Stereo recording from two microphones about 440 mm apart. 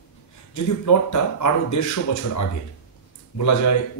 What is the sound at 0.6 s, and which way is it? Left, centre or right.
Speech, left.